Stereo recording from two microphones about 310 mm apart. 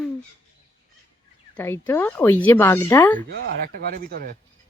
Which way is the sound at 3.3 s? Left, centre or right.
Right.